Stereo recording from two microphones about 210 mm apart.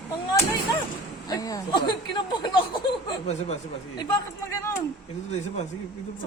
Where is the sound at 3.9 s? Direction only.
15° left (ahead or behind).